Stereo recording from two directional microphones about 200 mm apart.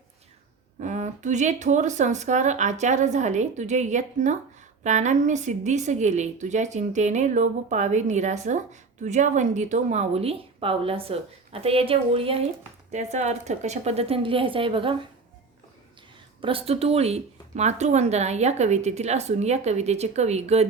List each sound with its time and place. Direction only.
0.8 s a woman's voice: 35° right (ahead or behind)
16.4 s a woman's voice: 25° right (ahead or behind)